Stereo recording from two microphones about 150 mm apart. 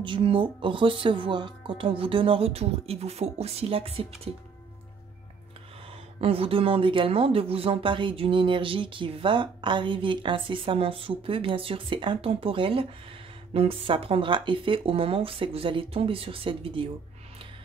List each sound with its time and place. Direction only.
0.0 s speech: 35° right (ahead or behind)
6.2 s speech: 40° right (ahead or behind)